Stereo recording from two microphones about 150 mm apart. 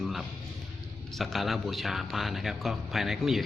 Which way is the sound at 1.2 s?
Centre (ahead or behind).